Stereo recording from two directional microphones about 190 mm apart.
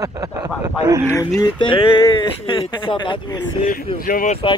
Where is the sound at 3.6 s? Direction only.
45° left (ahead or behind).